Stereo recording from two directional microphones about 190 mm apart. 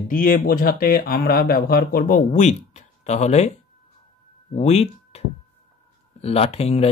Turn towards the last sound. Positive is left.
turn(degrees=35)  # may be behind; listen again after turning